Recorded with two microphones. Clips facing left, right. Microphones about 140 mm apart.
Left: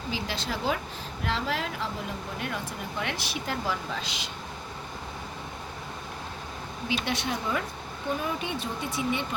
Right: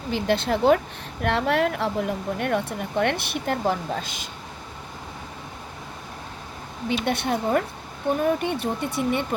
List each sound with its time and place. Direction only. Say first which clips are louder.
0.1 s speech: right 10 dB; 60° right (ahead or behind)
7.0 s speech: right 6 dB; 55° right (ahead or behind)